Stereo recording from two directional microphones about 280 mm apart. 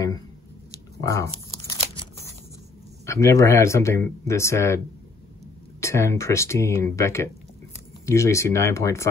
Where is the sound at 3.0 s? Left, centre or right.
Centre.